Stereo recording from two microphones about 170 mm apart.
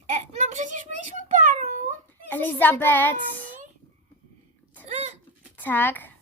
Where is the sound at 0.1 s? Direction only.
45° right (ahead or behind).